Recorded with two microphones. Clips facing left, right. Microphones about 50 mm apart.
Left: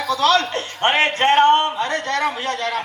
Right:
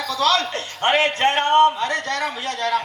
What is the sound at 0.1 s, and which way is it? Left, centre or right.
A man's voice, left.